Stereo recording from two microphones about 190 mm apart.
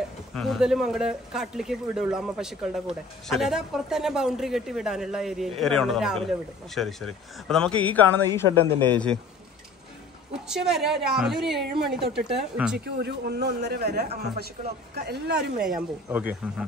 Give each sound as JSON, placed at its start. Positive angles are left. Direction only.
{"t": 0.3, "sound": "a man's voice", "side_deg": 0}
{"t": 10.5, "sound": "speech", "side_deg": -5}
{"t": 12.8, "sound": "speech", "side_deg": -60}
{"t": 15.6, "sound": "speech", "side_deg": -5}